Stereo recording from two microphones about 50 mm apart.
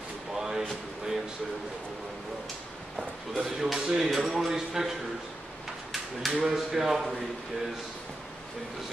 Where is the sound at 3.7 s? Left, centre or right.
Centre.